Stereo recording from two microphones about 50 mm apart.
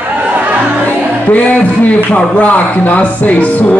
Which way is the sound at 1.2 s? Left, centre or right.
Left.